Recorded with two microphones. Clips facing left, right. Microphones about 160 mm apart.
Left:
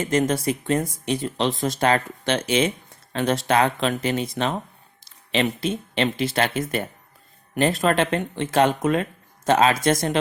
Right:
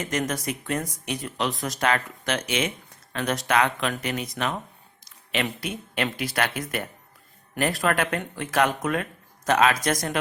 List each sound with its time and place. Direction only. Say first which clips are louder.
0.0 s speech: left 6 dB; 30° left (ahead or behind)